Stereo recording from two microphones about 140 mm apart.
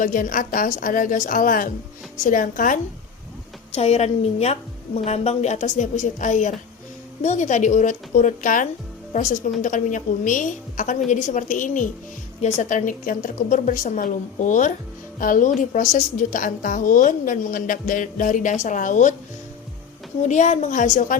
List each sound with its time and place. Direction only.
0.0 s a woman's voice: 75° left (ahead or behind)
3.7 s a woman's voice: 50° left (ahead or behind); by 11.9 s 65° left (ahead or behind)
12.4 s a woman's voice: 55° left (ahead or behind)
20.2 s a woman's voice: 60° left (ahead or behind)